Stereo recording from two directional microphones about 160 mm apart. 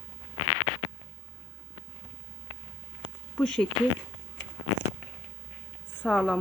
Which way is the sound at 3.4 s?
5° left (ahead or behind).